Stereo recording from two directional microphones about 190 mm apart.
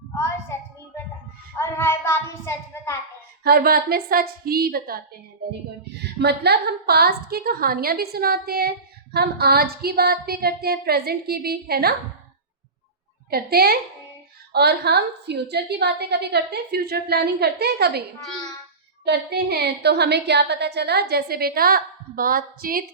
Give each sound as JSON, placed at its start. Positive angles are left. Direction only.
{"t": 1.5, "sound": "child singing", "side_deg": 15}
{"t": 3.4, "sound": "a woman's voice", "side_deg": -55}
{"t": 6.1, "sound": "a woman's voice", "side_deg": -60}
{"t": 13.3, "sound": "a woman's voice", "side_deg": -55}
{"t": 19.0, "sound": "a woman's voice", "side_deg": -60}